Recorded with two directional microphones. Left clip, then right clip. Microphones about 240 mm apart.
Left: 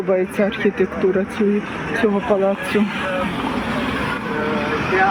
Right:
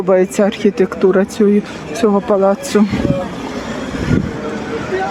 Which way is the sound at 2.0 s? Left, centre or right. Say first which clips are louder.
Right 5 dB; right.